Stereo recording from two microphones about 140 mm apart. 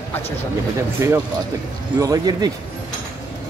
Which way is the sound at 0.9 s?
20° right (ahead or behind).